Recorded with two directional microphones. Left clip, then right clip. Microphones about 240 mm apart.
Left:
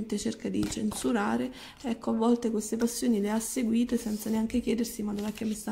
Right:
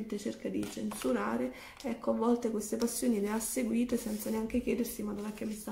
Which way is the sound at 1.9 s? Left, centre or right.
Left.